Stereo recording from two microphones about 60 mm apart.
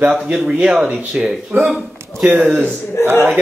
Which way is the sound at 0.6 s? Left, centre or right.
Right.